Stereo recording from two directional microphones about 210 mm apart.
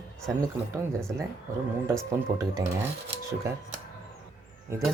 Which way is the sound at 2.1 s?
15° right (ahead or behind).